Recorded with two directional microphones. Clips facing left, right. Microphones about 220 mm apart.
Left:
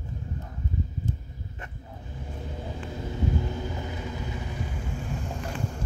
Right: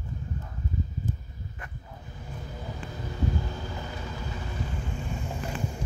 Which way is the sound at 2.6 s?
25° left (ahead or behind).